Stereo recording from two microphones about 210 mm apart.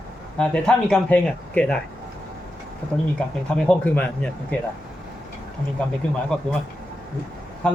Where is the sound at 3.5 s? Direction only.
5° left (ahead or behind).